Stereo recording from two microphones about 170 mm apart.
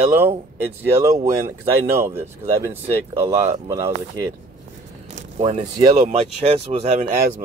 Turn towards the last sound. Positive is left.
turn(degrees=-40)  # may be behind; listen again after turning